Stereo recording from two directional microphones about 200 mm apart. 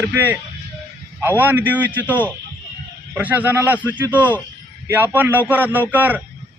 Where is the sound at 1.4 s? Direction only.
10° right (ahead or behind).